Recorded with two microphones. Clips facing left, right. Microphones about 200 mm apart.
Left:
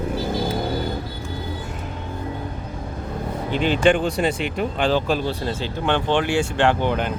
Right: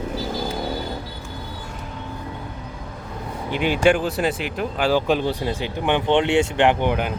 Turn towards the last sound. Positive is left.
turn(degrees=-15)  # may be behind; listen again after turning